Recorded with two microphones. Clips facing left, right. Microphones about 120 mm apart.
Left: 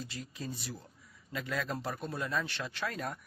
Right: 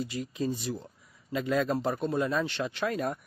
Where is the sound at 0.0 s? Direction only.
15° right (ahead or behind).